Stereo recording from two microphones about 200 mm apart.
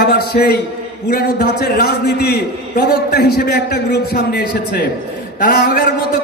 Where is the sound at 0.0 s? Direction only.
50° left (ahead or behind).